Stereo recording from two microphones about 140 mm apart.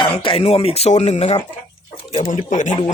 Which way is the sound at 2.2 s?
65° left (ahead or behind).